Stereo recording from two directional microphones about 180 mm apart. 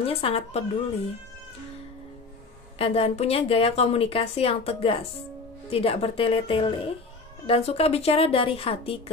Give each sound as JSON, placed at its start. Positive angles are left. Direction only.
{"t": 0.0, "sound": "speech", "side_deg": 30}
{"t": 2.8, "sound": "speech", "side_deg": 35}